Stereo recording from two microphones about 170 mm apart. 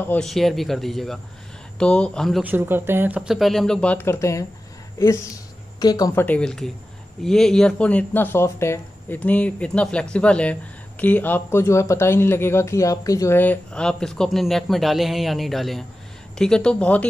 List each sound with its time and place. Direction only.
0.0 s speech: 5° left (ahead or behind)
2.4 s speech: 10° right (ahead or behind); by 6.2 s 20° left (ahead or behind)
6.2 s speech: 5° left (ahead or behind)